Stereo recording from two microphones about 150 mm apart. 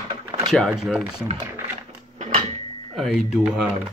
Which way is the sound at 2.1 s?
50° right (ahead or behind).